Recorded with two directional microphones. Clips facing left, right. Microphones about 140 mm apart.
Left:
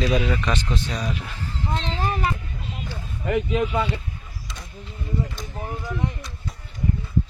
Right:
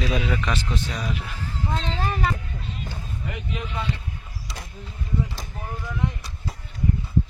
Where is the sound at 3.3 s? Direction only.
65° left (ahead or behind).